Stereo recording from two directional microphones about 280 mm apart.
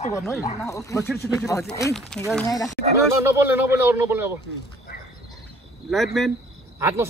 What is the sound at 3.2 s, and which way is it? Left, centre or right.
Speech, centre.